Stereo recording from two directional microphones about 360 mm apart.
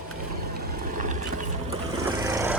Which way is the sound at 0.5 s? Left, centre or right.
Right.